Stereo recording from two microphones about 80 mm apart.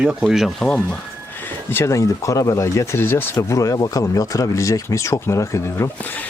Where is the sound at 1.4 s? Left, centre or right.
Left.